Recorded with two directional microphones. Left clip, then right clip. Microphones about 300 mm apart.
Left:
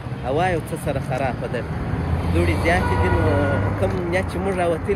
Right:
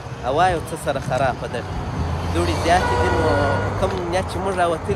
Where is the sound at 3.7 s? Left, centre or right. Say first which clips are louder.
Right 1 dB; centre.